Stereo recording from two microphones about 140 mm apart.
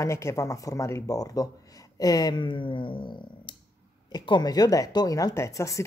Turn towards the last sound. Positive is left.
turn(degrees=20)  # may be behind; listen again after turning